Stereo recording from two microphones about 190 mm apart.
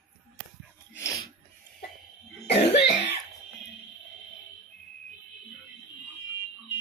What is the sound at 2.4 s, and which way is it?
Cough, 60° left (ahead or behind).